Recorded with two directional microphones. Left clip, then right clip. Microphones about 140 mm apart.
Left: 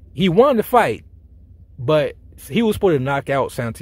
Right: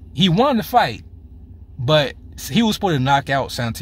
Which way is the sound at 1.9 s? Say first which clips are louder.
Even; 20° left (ahead or behind).